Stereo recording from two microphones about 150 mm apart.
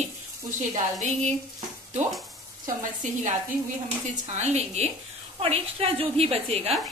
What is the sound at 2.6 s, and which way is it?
A woman's voice, 55° right (ahead or behind).